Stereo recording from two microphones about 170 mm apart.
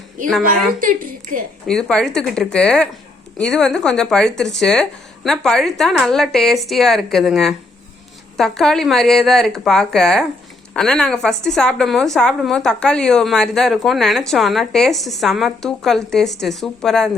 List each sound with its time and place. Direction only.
0.8 s a woman's voice: 55° right (ahead or behind)
1.6 s a woman's voice: 5° left (ahead or behind)